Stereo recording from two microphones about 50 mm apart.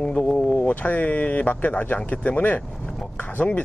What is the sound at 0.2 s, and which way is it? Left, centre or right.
Speech, left.